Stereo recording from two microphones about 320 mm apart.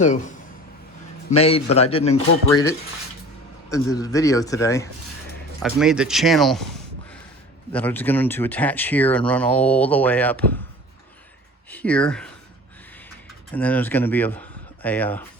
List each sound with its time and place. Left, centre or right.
1.3 s speech: centre
5.6 s speech: centre
7.7 s speech: centre
11.7 s speech: centre
13.5 s speech: centre